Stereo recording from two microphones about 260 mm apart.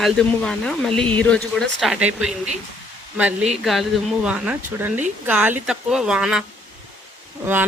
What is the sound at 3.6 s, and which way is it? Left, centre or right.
Speech, centre.